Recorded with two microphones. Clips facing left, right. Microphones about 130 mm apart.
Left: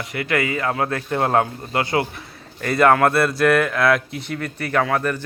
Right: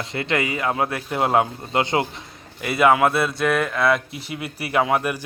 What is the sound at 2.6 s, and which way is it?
Speech, 5° right (ahead or behind).